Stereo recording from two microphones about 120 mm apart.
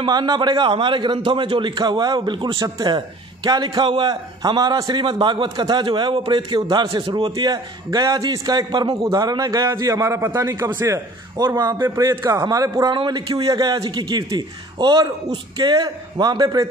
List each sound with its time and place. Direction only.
0.0 s a man's voice: 35° right (ahead or behind)
12.9 s a man's voice: 40° right (ahead or behind)